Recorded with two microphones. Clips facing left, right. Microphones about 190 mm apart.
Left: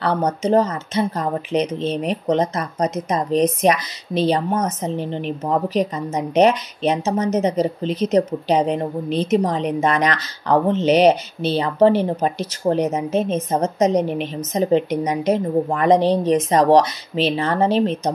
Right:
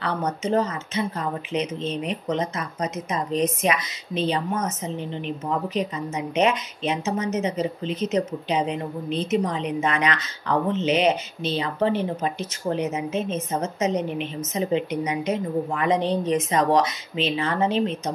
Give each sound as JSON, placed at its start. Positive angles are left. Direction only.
{"t": 0.0, "sound": "a woman's voice", "side_deg": 35}